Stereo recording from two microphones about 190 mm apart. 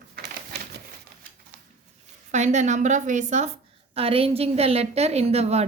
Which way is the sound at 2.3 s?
40° right (ahead or behind).